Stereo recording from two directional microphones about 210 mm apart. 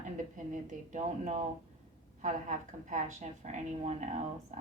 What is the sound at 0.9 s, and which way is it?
A woman's voice, 35° right (ahead or behind).